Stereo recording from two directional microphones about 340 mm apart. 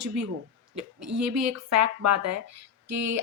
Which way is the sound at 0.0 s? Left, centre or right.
Right.